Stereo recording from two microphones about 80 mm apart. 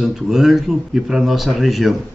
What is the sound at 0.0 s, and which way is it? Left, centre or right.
Speech, centre.